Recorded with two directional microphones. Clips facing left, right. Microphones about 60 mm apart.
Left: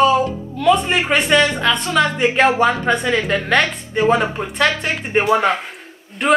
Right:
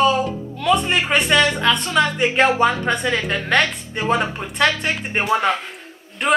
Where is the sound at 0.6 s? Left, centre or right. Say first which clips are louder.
Left 3 dB; left.